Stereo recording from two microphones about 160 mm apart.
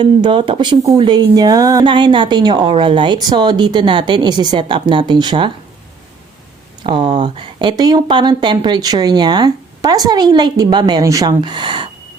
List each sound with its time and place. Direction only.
0.0 s speech: 30° right (ahead or behind)
6.8 s speech: 30° right (ahead or behind)